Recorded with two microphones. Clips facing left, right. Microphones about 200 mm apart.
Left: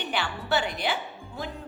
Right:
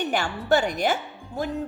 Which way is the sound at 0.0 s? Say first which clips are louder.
Right 5 dB; 45° right (ahead or behind).